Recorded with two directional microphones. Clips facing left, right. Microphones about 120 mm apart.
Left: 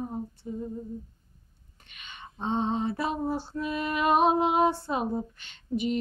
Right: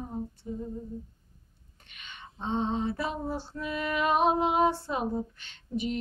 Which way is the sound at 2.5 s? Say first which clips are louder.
Left 1 dB; 15° left (ahead or behind).